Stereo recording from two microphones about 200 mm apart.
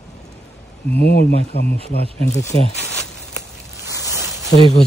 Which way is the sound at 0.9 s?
55° left (ahead or behind).